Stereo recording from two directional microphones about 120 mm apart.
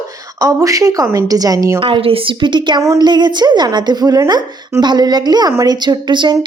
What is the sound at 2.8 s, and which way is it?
Speech, 25° right (ahead or behind).